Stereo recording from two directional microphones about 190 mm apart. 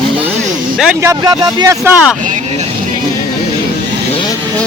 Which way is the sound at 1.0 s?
20° right (ahead or behind).